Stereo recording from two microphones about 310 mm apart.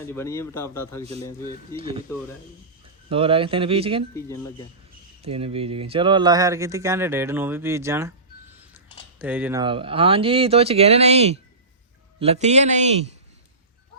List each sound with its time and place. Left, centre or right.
0.0 s a man's voice: centre
1.7 s speech: centre
3.1 s speech: centre
4.1 s a man's voice: centre
5.2 s speech: centre
9.1 s speech: centre; by 13.1 s right